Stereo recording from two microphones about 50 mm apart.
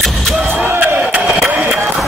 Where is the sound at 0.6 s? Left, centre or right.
Right.